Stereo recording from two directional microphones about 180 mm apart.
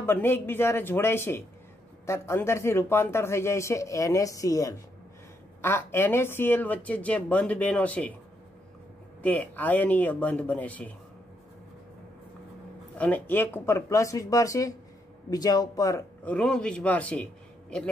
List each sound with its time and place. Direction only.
0.0 s a man's voice: 10° left (ahead or behind)
9.2 s a man's voice: 10° left (ahead or behind)
12.9 s a man's voice: 10° left (ahead or behind)
16.3 s a man's voice: 5° left (ahead or behind)